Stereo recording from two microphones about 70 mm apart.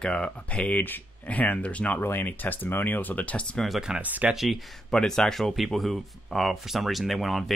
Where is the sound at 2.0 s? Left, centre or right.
Left.